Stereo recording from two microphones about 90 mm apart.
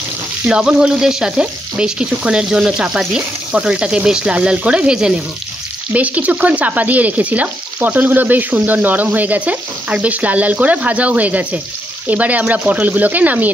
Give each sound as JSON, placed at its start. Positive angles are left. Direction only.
{"t": 0.5, "sound": "speech", "side_deg": -10}